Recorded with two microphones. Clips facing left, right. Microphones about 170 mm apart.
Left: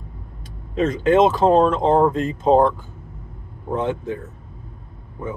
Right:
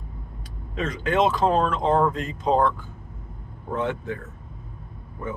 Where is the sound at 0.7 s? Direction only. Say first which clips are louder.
Left 7 dB; 25° left (ahead or behind).